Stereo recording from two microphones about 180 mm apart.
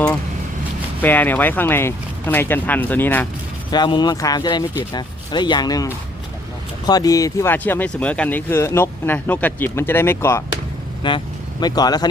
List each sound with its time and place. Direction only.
1.0 s speech: 10° left (ahead or behind)
3.7 s speech: 25° left (ahead or behind)
11.0 s speech: 25° left (ahead or behind)